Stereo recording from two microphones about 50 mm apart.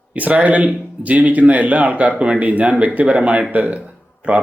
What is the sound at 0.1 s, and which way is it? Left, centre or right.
Speech, right.